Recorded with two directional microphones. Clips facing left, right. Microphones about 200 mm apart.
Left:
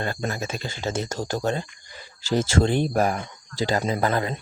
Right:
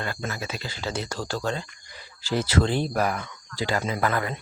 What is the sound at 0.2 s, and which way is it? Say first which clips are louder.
Speech: left 4 dB; 40° left (ahead or behind).